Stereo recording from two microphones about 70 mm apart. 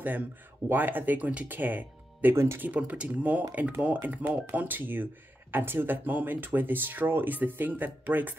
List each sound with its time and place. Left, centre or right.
0.0 s speech: right
2.3 s speech: right
2.6 s speech: right